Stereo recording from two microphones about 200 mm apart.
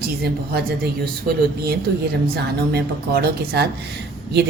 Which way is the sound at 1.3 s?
40° right (ahead or behind).